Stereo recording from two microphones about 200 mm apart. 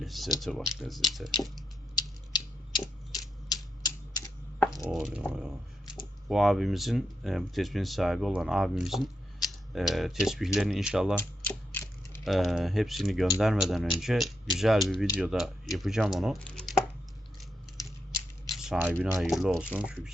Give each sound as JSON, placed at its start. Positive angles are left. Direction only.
{"t": 0.0, "sound": "speech", "side_deg": 0}
{"t": 2.0, "sound": "a sound", "side_deg": 20}
{"t": 4.8, "sound": "speech", "side_deg": -5}
{"t": 11.2, "sound": "typing", "side_deg": 10}
{"t": 12.2, "sound": "speech", "side_deg": 0}
{"t": 18.5, "sound": "speech", "side_deg": 0}